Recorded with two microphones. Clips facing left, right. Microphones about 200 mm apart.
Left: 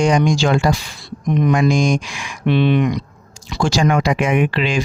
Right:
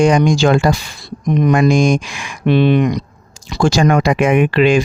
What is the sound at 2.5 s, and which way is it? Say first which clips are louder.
Speech: right 3 dB; 40° right (ahead or behind).